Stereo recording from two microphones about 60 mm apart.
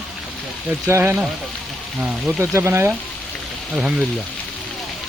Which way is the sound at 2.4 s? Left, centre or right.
Right.